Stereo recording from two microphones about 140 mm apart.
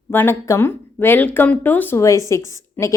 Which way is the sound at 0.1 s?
15° left (ahead or behind).